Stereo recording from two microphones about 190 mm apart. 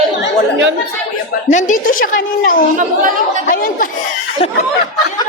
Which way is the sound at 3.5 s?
50° left (ahead or behind).